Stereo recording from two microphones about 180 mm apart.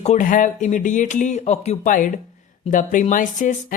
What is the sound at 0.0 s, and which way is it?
Speech, 40° left (ahead or behind).